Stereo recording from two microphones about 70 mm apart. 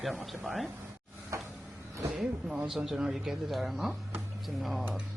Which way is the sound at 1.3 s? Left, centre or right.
Right.